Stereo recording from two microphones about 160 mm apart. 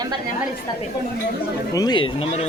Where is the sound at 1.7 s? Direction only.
25° left (ahead or behind).